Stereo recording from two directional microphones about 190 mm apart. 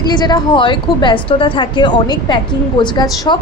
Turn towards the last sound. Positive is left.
turn(degrees=20)  # may be behind; listen again after turning